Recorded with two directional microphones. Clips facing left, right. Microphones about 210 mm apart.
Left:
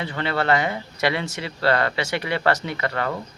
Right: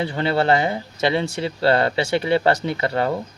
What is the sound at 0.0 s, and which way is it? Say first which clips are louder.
Speech: right 4 dB; 30° right (ahead or behind).